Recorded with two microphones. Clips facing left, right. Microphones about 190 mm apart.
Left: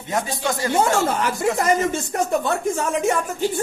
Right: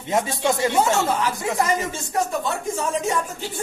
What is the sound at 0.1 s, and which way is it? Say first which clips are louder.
Speech: right 2 dB; 25° right (ahead or behind).